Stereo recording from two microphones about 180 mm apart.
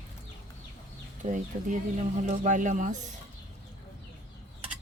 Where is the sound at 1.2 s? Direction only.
45° right (ahead or behind).